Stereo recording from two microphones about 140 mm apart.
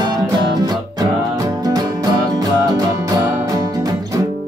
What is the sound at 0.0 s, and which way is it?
Music, 30° right (ahead or behind).